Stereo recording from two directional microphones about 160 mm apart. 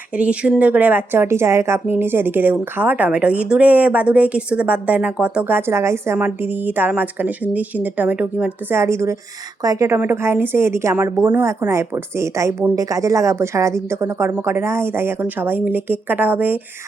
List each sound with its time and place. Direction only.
0.2 s a woman's voice: 5° right (ahead or behind)